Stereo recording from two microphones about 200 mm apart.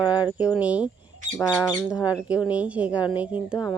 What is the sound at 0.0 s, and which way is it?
Speech, 5° right (ahead or behind).